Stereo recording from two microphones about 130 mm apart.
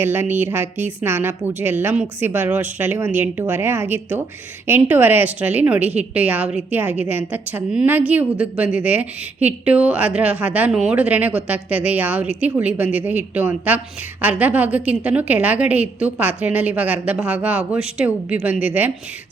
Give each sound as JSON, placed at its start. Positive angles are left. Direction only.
{"t": 0.0, "sound": "a woman's voice", "side_deg": -15}